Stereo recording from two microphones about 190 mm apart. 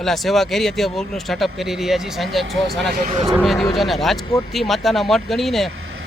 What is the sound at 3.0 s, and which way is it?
Speech, 40° right (ahead or behind).